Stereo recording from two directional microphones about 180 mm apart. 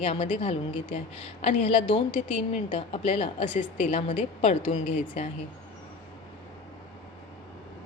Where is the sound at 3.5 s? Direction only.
45° left (ahead or behind).